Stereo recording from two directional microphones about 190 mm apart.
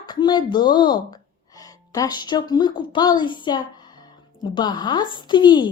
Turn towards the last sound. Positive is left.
turn(degrees=25)  # may be behind; listen again after turning